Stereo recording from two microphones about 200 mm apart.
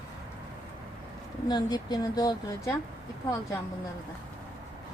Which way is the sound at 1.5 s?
20° left (ahead or behind).